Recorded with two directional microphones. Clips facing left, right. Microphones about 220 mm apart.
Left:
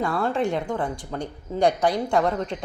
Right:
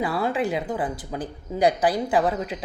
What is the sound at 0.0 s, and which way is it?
Speech, 5° right (ahead or behind).